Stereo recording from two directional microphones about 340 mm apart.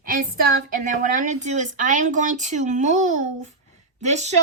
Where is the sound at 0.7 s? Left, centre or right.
Right.